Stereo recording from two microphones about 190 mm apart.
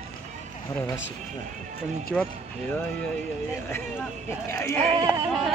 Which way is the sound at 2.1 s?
5° left (ahead or behind).